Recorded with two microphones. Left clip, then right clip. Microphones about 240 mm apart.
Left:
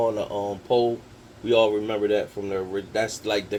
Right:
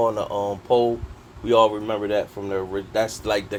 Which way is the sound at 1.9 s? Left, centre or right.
Right.